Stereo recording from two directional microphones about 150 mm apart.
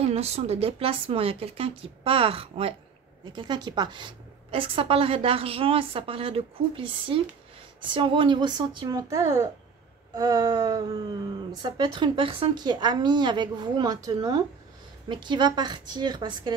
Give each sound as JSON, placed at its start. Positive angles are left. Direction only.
{"t": 0.1, "sound": "a woman's voice", "side_deg": -45}